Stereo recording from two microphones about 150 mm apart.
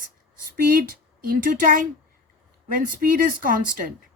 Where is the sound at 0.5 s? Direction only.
70° right (ahead or behind).